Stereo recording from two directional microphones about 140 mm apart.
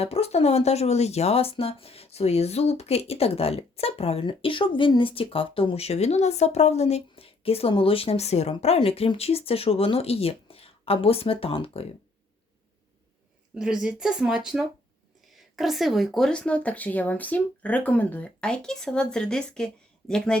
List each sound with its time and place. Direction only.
0.0 s speech: 45° left (ahead or behind)
13.6 s speech: 5° right (ahead or behind)